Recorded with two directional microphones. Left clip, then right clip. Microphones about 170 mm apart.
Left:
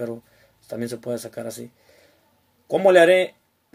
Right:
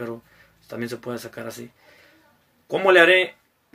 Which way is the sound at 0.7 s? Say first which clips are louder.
Left 2 dB; 20° left (ahead or behind).